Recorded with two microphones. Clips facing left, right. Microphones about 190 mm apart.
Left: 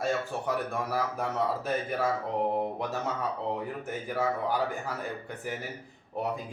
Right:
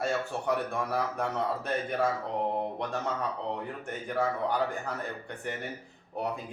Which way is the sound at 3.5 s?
5° left (ahead or behind).